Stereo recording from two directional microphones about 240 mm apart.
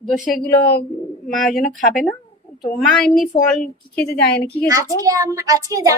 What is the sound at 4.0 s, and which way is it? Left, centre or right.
Speech, left.